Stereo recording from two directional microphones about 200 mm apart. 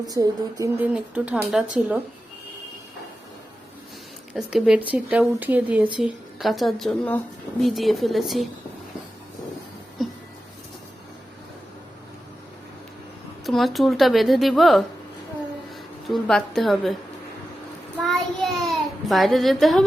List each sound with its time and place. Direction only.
0.0 s a woman's voice: 20° right (ahead or behind)
4.4 s a woman's voice: 5° right (ahead or behind)
13.4 s a woman's voice: centre (ahead or behind)
16.0 s a woman's voice: centre (ahead or behind)
18.0 s child singing: centre (ahead or behind)